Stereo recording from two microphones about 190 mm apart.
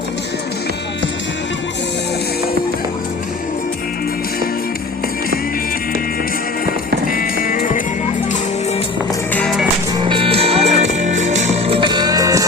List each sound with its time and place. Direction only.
7.1 s music: 50° left (ahead or behind)
9.3 s music: centre (ahead or behind)
10.1 s music: 30° right (ahead or behind)